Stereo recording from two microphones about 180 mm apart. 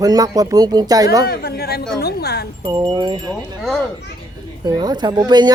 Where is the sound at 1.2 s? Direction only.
60° left (ahead or behind).